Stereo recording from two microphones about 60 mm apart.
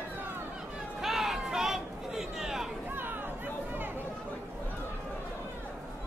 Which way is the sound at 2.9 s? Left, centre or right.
Right.